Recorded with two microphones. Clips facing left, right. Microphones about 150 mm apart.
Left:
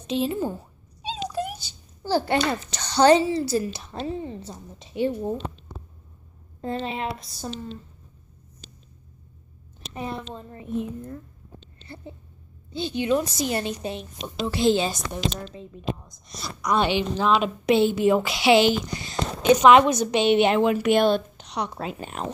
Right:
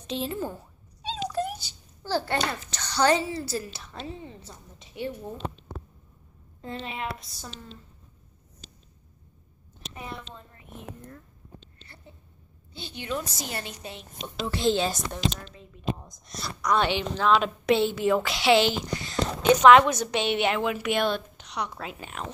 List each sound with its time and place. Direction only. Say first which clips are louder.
0.0 s a woman's voice: left 6 dB; 15° left (ahead or behind)
1.0 s a sound: even; 10° left (ahead or behind)
2.0 s a child's voice: left 5 dB; 15° left (ahead or behind)
3.9 s a woman's voice: left 7 dB; 35° left (ahead or behind)
6.6 s a woman's voice: left 6 dB; 35° left (ahead or behind)
9.9 s a woman's voice: left 8 dB; 35° left (ahead or behind)
12.7 s a woman's voice: left 10 dB; 20° left (ahead or behind)
14.2 s a woman's voice: left 4 dB; 10° left (ahead or behind)
16.6 s a woman's voice: left 2 dB; 15° left (ahead or behind); by 22.3 s 35° left (ahead or behind)